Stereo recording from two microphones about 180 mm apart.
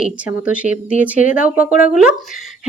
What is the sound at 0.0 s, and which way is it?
A woman's voice, 5° right (ahead or behind).